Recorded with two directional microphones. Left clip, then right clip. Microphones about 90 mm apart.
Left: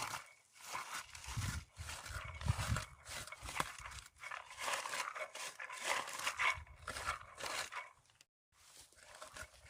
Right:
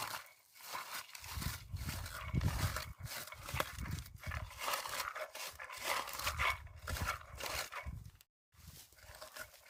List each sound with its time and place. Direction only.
0.0 s a sound: 20° right (ahead or behind)
1.8 s dog: 25° right (ahead or behind)
3.4 s horse: 10° right (ahead or behind)
4.4 s dog: 5° right (ahead or behind); by 7.9 s 25° right (ahead or behind)
9.0 s dog: 15° right (ahead or behind)